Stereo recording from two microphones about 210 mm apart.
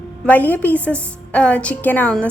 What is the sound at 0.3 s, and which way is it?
A woman's voice, 10° left (ahead or behind).